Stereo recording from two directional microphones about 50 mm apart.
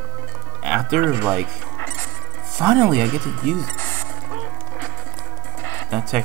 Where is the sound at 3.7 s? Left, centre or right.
Left.